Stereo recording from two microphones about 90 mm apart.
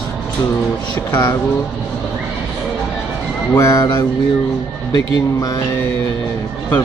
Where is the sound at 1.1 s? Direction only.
55° left (ahead or behind).